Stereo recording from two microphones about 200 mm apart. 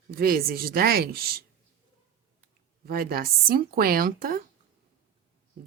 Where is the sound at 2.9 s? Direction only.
45° right (ahead or behind).